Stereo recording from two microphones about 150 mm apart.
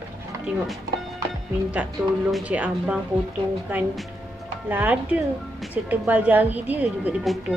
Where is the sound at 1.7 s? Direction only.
5° right (ahead or behind).